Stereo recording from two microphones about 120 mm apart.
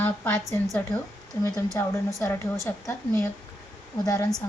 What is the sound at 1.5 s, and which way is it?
A woman's voice, 30° left (ahead or behind).